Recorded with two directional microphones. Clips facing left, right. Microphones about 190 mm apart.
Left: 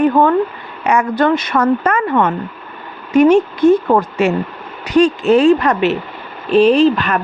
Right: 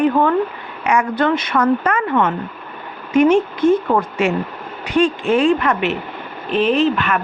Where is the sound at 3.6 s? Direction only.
70° left (ahead or behind).